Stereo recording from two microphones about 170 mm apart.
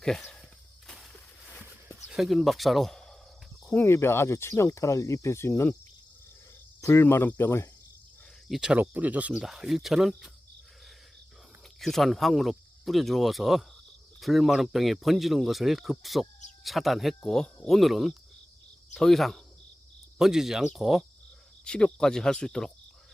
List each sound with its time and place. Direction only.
0.0 s speech: 5° left (ahead or behind)
1.5 s a sound: 10° left (ahead or behind)
2.0 s speech: centre (ahead or behind)
3.7 s speech: 15° left (ahead or behind)
6.8 s speech: 15° left (ahead or behind)
8.4 s speech: centre (ahead or behind)
11.8 s speech: centre (ahead or behind)